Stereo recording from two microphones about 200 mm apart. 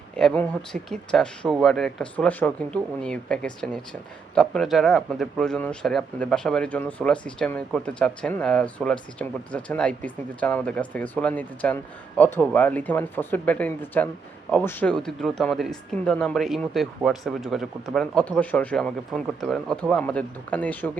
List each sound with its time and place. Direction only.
0.2 s speech: 5° left (ahead or behind)